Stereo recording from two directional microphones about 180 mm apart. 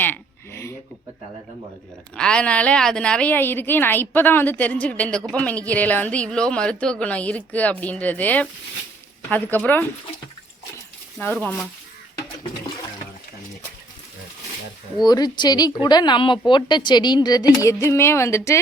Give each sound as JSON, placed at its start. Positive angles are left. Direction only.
{"t": 0.0, "sound": "a sound", "side_deg": 10}
{"t": 2.1, "sound": "a woman's voice", "side_deg": 5}
{"t": 11.2, "sound": "a woman's voice", "side_deg": 10}
{"t": 15.0, "sound": "a woman's voice", "side_deg": 20}